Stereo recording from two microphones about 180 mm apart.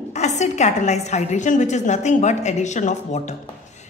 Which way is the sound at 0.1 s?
40° left (ahead or behind).